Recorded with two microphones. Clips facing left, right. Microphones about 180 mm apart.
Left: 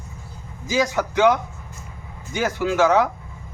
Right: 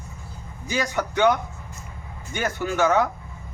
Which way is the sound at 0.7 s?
90° left.